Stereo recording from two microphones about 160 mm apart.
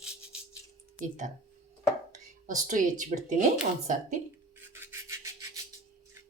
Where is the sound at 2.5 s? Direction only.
55° right (ahead or behind).